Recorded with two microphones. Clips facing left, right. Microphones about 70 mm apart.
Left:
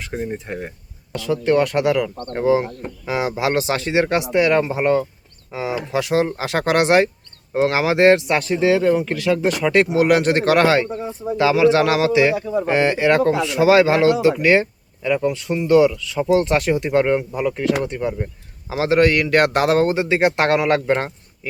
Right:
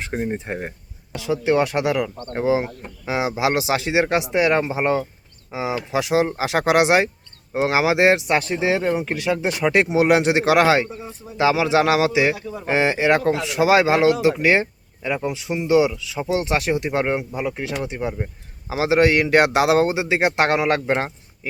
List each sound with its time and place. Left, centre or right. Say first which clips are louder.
0.0 s speech: right 1 dB; right
1.1 s speech: left 2 dB; centre